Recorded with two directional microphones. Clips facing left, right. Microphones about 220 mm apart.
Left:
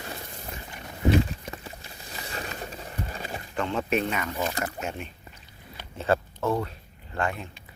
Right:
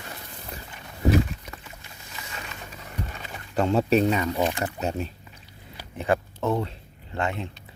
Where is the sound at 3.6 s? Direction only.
40° right (ahead or behind).